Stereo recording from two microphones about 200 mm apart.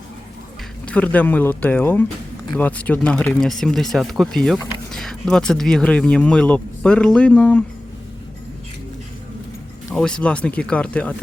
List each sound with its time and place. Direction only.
0.9 s speech: 5° left (ahead or behind)
9.9 s speech: 5° left (ahead or behind)